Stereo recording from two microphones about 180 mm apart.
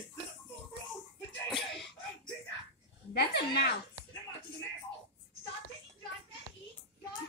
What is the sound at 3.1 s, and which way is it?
Speech, 60° left (ahead or behind).